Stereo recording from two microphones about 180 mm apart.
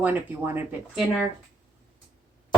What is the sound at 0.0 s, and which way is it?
Speech, 10° right (ahead or behind).